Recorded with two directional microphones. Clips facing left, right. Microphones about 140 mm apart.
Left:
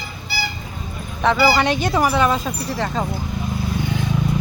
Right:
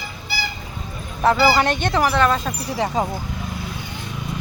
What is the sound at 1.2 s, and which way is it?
Speech, 5° right (ahead or behind).